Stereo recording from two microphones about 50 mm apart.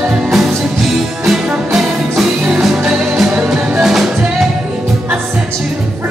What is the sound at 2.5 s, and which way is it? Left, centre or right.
Music, centre.